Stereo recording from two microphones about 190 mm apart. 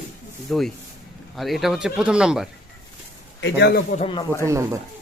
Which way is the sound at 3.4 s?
55° left (ahead or behind).